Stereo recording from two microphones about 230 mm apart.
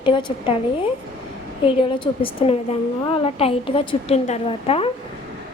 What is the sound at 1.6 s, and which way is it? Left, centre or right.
A woman's voice, left.